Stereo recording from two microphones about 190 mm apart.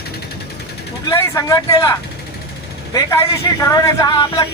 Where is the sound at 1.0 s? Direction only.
15° left (ahead or behind).